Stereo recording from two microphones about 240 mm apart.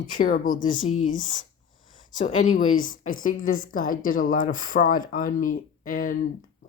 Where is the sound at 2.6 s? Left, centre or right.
Left.